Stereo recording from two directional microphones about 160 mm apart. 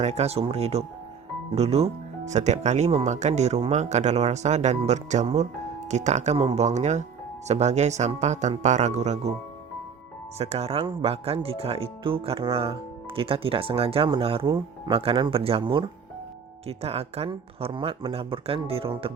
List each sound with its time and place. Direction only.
0.0 s speech: 45° right (ahead or behind)
10.3 s speech: 40° right (ahead or behind)
14.4 s speech: 25° right (ahead or behind)
14.9 s speech: 35° right (ahead or behind)